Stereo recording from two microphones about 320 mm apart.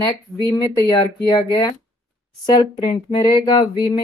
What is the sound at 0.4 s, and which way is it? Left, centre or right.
Speech, centre.